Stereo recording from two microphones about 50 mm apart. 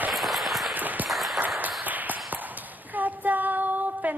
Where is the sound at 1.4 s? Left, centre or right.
Right.